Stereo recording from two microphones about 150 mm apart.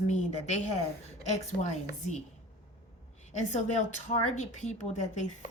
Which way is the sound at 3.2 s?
50° left (ahead or behind).